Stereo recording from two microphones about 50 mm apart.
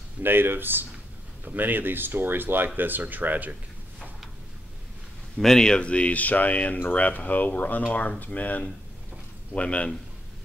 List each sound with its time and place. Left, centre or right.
0.2 s speech: right
5.4 s speech: centre